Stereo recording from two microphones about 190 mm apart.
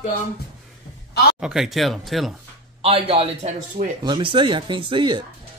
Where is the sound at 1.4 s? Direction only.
Centre (ahead or behind).